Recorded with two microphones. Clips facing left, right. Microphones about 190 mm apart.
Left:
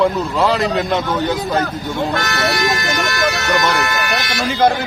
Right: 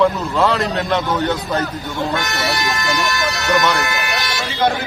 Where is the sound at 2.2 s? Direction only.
60° left (ahead or behind).